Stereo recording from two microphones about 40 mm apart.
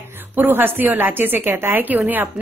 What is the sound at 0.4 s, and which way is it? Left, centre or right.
A woman's voice, right.